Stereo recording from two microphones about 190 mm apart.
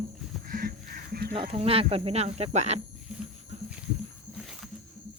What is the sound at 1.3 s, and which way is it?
Speech, 30° right (ahead or behind).